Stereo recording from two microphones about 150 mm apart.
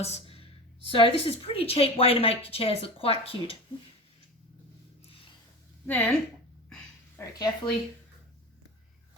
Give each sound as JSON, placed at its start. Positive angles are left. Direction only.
{"t": 0.0, "sound": "a woman's voice", "side_deg": 40}
{"t": 5.8, "sound": "a woman's voice", "side_deg": 10}
{"t": 7.3, "sound": "speech", "side_deg": 25}